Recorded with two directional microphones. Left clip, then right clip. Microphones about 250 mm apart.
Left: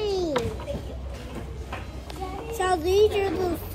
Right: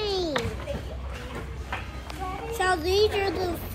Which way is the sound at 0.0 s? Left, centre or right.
Centre.